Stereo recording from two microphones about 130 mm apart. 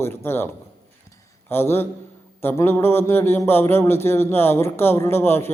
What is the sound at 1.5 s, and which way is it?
A man's voice, 15° left (ahead or behind).